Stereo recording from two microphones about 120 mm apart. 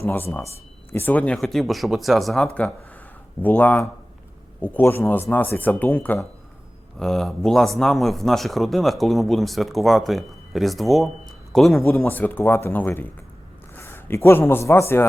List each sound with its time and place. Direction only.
0.0 s speech: 20° left (ahead or behind); by 2.7 s 5° left (ahead or behind)
3.4 s speech: 15° left (ahead or behind)
7.0 s speech: 5° left (ahead or behind)
12.0 s a man's voice: 15° left (ahead or behind)